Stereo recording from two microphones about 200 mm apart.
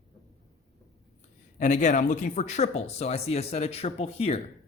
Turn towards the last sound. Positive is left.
turn(degrees=30)  # may be behind; listen again after turning